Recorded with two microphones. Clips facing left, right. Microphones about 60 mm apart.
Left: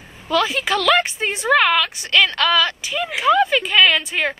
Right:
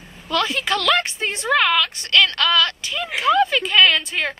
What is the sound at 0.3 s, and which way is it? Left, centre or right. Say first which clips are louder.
A woman's voice: left 2 dB; centre.